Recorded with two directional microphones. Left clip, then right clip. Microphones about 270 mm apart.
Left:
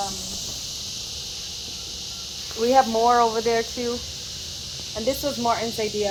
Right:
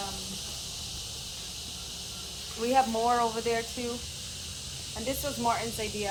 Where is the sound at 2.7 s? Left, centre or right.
Left.